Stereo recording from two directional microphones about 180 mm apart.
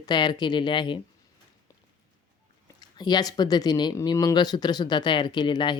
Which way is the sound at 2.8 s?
20° left (ahead or behind).